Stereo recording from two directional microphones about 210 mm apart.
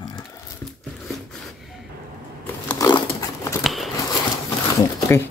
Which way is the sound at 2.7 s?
20° left (ahead or behind).